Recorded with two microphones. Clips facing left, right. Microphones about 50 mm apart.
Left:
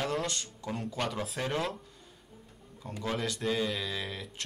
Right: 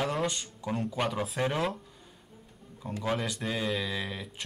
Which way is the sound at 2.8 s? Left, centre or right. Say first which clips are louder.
Right 2 dB; centre.